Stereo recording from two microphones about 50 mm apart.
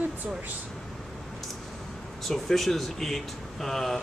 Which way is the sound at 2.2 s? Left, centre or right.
Centre.